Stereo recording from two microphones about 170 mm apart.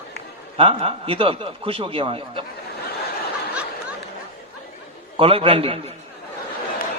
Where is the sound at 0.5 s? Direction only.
35° right (ahead or behind).